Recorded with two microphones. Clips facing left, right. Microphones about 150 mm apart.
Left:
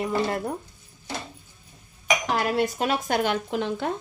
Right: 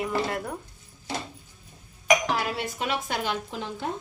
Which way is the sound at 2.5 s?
45° left (ahead or behind).